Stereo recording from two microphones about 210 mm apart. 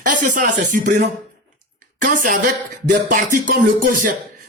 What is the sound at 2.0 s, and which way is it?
Speech, 40° right (ahead or behind).